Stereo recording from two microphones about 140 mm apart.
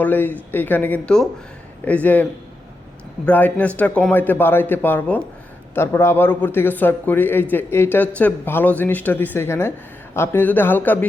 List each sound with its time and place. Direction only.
0.0 s speech: 10° left (ahead or behind)
3.2 s speech: 10° left (ahead or behind)